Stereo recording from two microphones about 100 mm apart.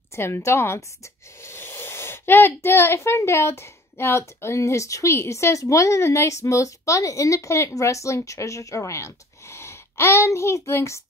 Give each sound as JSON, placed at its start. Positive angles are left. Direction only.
{"t": 0.1, "sound": "a child's voice", "side_deg": 25}